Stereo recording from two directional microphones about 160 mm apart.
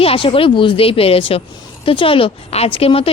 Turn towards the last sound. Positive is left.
turn(degrees=35)  # may be behind; listen again after turning